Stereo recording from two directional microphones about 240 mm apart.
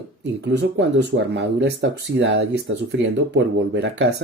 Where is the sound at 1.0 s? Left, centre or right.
Right.